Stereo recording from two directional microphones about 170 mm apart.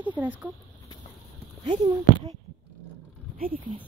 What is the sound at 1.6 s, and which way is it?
Speech, 25° right (ahead or behind).